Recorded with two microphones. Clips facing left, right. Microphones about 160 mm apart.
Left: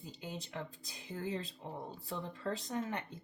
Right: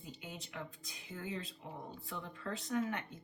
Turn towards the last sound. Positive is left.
turn(degrees=30)  # may be behind; listen again after turning